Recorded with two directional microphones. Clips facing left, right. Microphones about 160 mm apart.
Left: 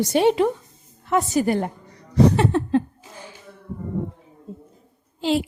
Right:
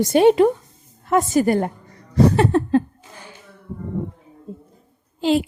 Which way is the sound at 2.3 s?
50° right (ahead or behind).